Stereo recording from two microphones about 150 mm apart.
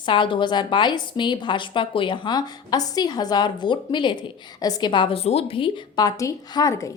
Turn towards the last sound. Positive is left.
turn(degrees=20)  # may be behind; listen again after turning